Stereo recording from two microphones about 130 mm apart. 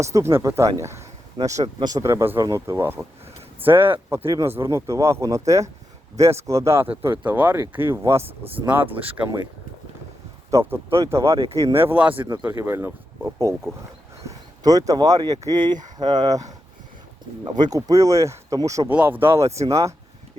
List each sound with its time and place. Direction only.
0.0 s speech: 20° right (ahead or behind)
0.8 s a sound: 20° right (ahead or behind)
1.6 s speech: 30° right (ahead or behind); by 9.2 s 15° right (ahead or behind)
10.5 s speech: 20° right (ahead or behind)
18.9 s speech: 15° right (ahead or behind)